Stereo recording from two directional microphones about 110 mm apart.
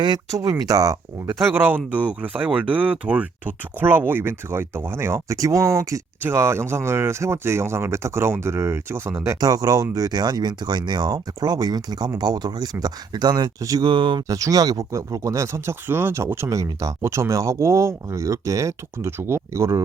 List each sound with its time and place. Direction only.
0.0 s speech: 35° right (ahead or behind)
13.8 s speech: 45° right (ahead or behind)
14.3 s speech: 30° right (ahead or behind)